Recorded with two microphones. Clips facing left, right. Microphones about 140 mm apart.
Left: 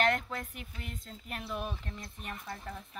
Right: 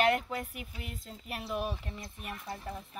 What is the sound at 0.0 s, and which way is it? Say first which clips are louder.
Speech: right 2 dB; 10° right (ahead or behind).